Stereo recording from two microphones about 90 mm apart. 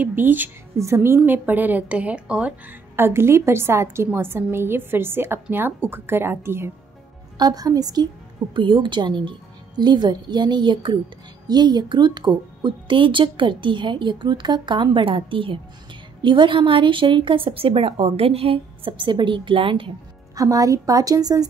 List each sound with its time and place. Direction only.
0.0 s a woman's voice: 20° right (ahead or behind)
0.7 s a woman's voice: 30° right (ahead or behind); by 2.5 s 10° right (ahead or behind)
3.0 s a woman's voice: 30° right (ahead or behind)
7.3 s a woman's voice: 45° right (ahead or behind)
8.5 s speech: 70° right (ahead or behind)
16.2 s a woman's voice: 65° right (ahead or behind)
20.3 s a woman's voice: 40° right (ahead or behind)